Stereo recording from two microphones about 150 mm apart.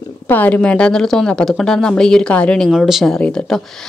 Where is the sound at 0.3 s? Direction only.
10° left (ahead or behind).